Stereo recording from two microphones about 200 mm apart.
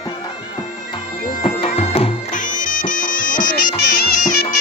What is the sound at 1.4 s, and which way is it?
Bagpipes, 30° left (ahead or behind).